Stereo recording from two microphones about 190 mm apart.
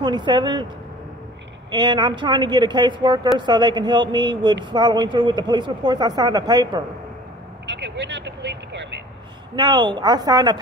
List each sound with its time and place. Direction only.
0.0 s speech: 25° right (ahead or behind)
1.7 s speech: 20° right (ahead or behind)
7.6 s vehicle: 65° right (ahead or behind)
9.6 s speech: 25° right (ahead or behind)